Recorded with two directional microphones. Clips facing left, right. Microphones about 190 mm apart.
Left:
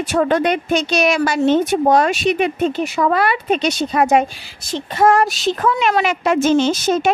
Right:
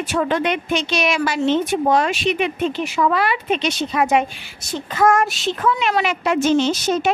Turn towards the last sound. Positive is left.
turn(degrees=45)  # may be behind; listen again after turning